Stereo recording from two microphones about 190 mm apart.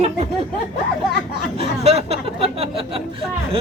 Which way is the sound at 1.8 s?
30° right (ahead or behind).